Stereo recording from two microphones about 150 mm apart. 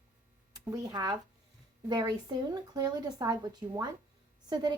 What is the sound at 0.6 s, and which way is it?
A woman's voice, 25° right (ahead or behind).